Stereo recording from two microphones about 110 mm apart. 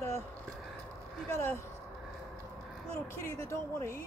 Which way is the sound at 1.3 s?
20° left (ahead or behind).